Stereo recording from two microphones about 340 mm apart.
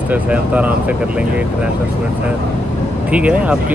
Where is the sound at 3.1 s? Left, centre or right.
Centre.